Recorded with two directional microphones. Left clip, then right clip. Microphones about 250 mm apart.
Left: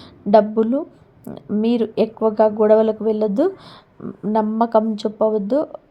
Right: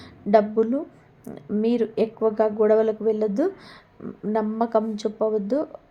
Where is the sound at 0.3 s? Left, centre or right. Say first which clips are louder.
Left 4 dB; centre.